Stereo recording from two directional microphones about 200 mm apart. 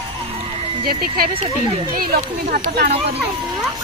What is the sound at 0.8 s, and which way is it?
Speech, 50° right (ahead or behind).